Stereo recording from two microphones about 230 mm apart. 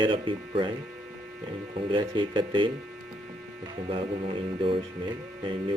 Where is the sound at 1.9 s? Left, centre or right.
Right.